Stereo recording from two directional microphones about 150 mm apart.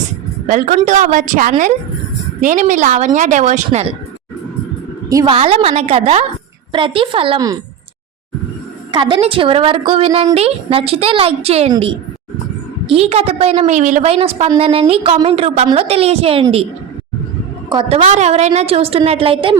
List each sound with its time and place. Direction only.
0.4 s a woman's voice: 60° right (ahead or behind)
5.0 s a woman's voice: 25° right (ahead or behind)
5.3 s a woman's voice: 40° right (ahead or behind)
7.3 s speech: 25° right (ahead or behind)
8.9 s a woman's voice: 35° right (ahead or behind)
12.9 s a woman's voice: 40° right (ahead or behind)
14.1 s a woman's voice: 40° right (ahead or behind)
17.7 s a woman's voice: 35° right (ahead or behind)